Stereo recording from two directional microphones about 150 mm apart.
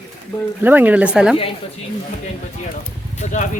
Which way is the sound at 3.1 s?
55° left (ahead or behind).